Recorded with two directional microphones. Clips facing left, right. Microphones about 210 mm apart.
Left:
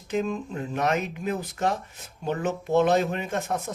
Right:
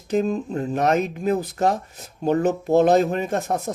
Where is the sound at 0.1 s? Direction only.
40° right (ahead or behind).